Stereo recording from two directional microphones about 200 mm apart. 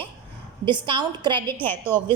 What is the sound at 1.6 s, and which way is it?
Speech, 10° left (ahead or behind).